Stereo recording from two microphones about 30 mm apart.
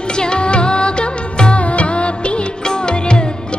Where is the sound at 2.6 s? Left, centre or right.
Left.